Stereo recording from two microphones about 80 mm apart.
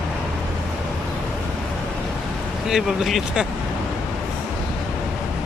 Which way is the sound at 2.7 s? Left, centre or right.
Centre.